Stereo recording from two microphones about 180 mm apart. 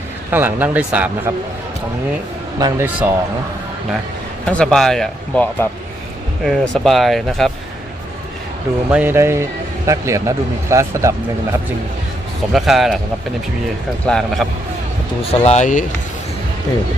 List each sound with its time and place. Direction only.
0.3 s speech: 10° right (ahead or behind)
2.6 s speech: 15° right (ahead or behind)
4.4 s speech: 5° left (ahead or behind)
8.9 s speech: 10° right (ahead or behind)
12.5 s speech: centre (ahead or behind)
14.1 s speech: centre (ahead or behind)
15.2 s speech: 35° left (ahead or behind)